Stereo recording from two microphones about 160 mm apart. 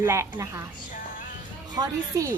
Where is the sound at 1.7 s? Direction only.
20° right (ahead or behind).